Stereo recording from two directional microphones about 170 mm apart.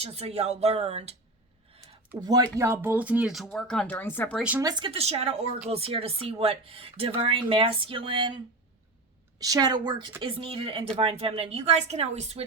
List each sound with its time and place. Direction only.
0.0 s speech: 35° right (ahead or behind)
2.2 s speech: 20° right (ahead or behind); by 4.4 s 10° left (ahead or behind)
4.4 s speech: 10° right (ahead or behind)
4.6 s speech: 25° right (ahead or behind)
9.4 s a woman's voice: 20° right (ahead or behind); by 12.5 s 40° right (ahead or behind)